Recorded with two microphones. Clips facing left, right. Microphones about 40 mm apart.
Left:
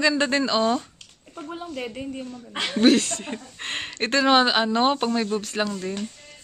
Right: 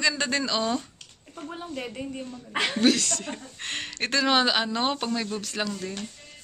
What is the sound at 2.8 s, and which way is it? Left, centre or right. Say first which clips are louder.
Speech: left 6 dB; left.